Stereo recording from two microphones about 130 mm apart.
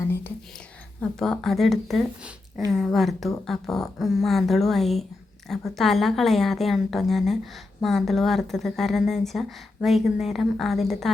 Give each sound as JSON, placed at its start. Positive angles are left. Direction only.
{"t": 1.2, "sound": "speech", "side_deg": 0}